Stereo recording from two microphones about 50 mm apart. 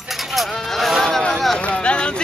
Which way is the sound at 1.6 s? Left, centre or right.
Left.